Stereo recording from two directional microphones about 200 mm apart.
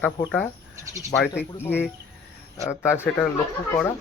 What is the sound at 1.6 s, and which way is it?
Speech, 10° left (ahead or behind).